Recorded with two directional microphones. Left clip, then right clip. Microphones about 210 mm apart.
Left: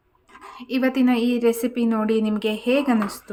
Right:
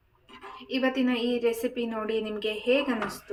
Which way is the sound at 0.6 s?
55° left (ahead or behind).